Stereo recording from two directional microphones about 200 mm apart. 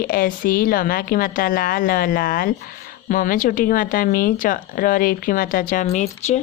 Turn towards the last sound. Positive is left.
turn(degrees=35)  # may be behind; listen again after turning